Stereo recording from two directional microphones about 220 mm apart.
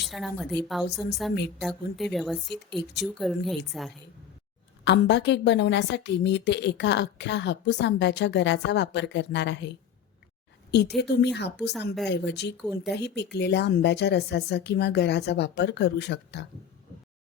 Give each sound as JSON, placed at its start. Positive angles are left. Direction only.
{"t": 0.0, "sound": "a woman's voice", "side_deg": 0}
{"t": 4.9, "sound": "a woman's voice", "side_deg": 50}